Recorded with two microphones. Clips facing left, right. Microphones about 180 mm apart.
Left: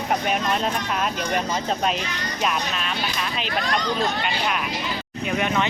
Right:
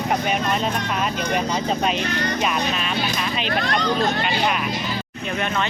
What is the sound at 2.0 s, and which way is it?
Speech, 55° right (ahead or behind).